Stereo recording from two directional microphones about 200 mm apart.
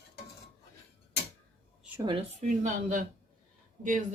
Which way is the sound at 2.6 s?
40° right (ahead or behind).